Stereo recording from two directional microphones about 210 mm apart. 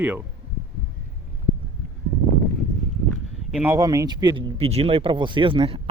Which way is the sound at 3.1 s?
5° right (ahead or behind).